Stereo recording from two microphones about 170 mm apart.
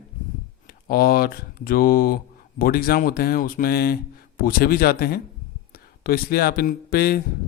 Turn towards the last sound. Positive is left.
turn(degrees=65)  # may be behind; listen again after turning